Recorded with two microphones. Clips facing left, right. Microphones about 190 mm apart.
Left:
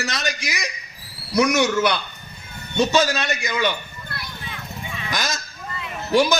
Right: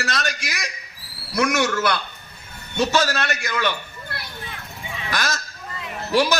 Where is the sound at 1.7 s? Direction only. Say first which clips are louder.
Left 2 dB; 15° left (ahead or behind).